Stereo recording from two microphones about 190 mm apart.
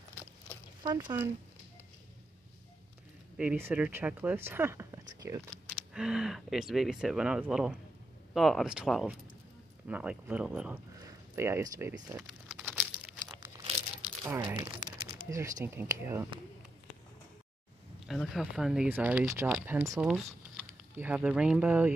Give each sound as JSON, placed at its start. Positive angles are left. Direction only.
{"t": 0.8, "sound": "speech", "side_deg": -10}
{"t": 3.3, "sound": "speech", "side_deg": -10}
{"t": 5.7, "sound": "speech", "side_deg": -5}
{"t": 12.2, "sound": "crumpling", "side_deg": -5}
{"t": 14.2, "sound": "speech", "side_deg": -15}
{"t": 18.0, "sound": "speech", "side_deg": 0}